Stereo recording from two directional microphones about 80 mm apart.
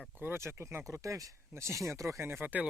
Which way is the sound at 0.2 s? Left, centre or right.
Right.